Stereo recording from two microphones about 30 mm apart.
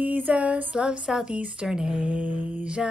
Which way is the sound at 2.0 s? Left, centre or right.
Right.